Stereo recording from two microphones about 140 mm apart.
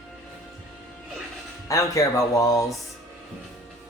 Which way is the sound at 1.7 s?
20° left (ahead or behind).